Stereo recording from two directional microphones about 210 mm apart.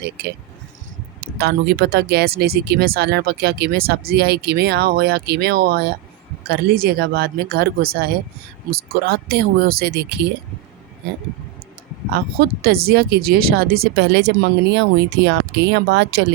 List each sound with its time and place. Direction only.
1.2 s speech: 50° right (ahead or behind)
12.1 s speech: 45° right (ahead or behind)